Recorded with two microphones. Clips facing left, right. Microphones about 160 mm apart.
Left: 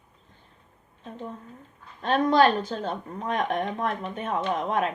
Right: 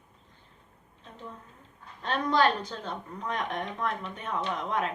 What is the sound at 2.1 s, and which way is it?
Speech, 50° left (ahead or behind).